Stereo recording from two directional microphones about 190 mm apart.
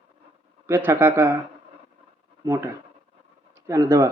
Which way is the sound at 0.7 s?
10° right (ahead or behind).